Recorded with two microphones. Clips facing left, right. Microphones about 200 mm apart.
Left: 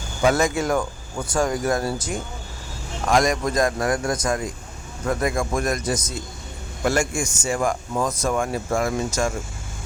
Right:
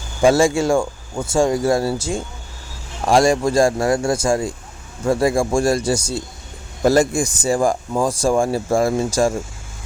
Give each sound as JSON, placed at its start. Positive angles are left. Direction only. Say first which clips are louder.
{"t": 0.2, "sound": "speech", "louder": "right 5 dB", "side_deg": -30}